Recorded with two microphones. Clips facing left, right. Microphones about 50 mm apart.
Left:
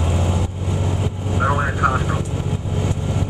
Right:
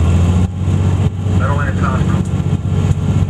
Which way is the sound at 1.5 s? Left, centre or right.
Centre.